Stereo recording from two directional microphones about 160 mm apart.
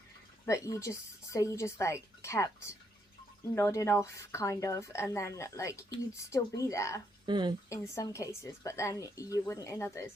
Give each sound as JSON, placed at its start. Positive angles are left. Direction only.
{"t": 0.4, "sound": "speech", "side_deg": 20}
{"t": 3.5, "sound": "speech", "side_deg": 15}
{"t": 7.3, "sound": "speech", "side_deg": -30}
{"t": 7.7, "sound": "speech", "side_deg": 20}